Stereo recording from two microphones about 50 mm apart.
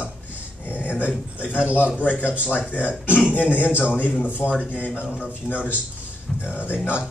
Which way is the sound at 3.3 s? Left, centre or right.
Left.